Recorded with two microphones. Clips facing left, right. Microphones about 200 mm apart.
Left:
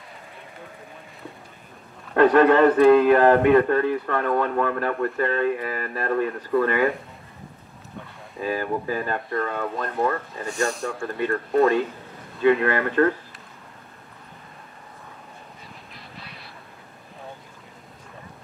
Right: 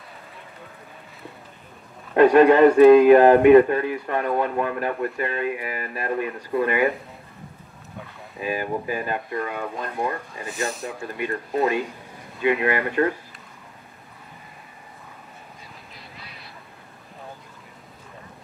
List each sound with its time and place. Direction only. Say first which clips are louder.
2.1 s a man's voice: right 2 dB; 15° right (ahead or behind)
8.4 s a man's voice: left 1 dB; 15° right (ahead or behind)
10.5 s speech: left 3 dB; centre (ahead or behind)
10.9 s a man's voice: left 3 dB; 15° right (ahead or behind)